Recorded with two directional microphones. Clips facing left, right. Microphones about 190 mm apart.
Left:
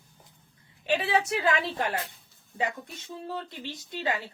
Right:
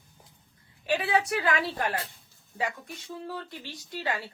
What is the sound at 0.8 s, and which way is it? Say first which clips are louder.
A woman's voice: even; 25° left (ahead or behind).